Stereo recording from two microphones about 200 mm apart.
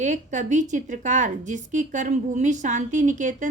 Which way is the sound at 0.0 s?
35° right (ahead or behind).